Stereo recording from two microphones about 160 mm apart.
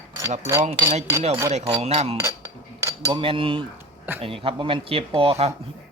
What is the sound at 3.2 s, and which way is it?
Speech, 35° right (ahead or behind).